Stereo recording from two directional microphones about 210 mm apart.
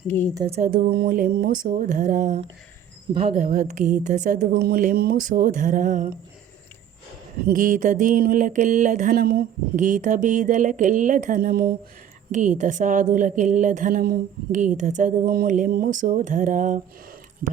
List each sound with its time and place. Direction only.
0.3 s speech: 30° right (ahead or behind)
0.7 s a woman's voice: 45° right (ahead or behind)
7.4 s a woman's voice: 40° right (ahead or behind)